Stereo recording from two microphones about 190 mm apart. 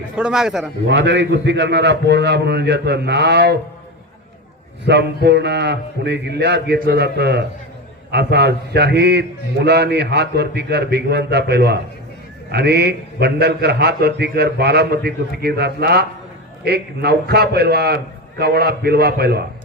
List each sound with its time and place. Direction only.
0.2 s a man's voice: 5° right (ahead or behind)
0.9 s a man's voice: 65° right (ahead or behind)
4.9 s a man's voice: 60° right (ahead or behind)